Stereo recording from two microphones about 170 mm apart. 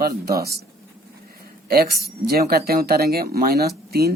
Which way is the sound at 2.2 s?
65° right (ahead or behind).